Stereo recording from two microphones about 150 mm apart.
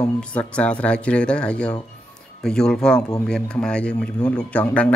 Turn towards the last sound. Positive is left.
turn(degrees=10)  # may be behind; listen again after turning